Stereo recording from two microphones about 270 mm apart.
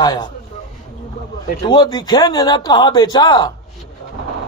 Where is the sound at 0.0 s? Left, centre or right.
Centre.